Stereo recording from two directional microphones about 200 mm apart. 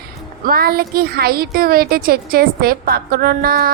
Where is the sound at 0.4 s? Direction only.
50° right (ahead or behind).